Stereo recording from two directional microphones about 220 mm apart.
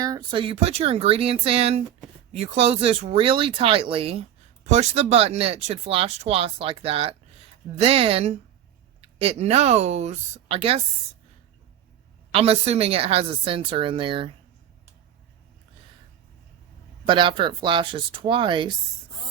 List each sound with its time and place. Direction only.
0.0 s speech: 20° right (ahead or behind)
12.3 s speech: 25° right (ahead or behind)
17.1 s speech: 20° right (ahead or behind)